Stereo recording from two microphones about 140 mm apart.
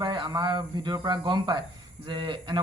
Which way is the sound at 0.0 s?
35° right (ahead or behind).